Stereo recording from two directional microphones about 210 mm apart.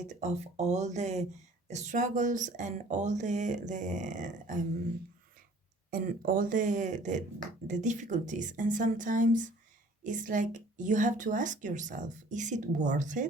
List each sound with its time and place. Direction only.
0.1 s a woman's voice: 35° right (ahead or behind)
5.9 s a woman's voice: 40° right (ahead or behind)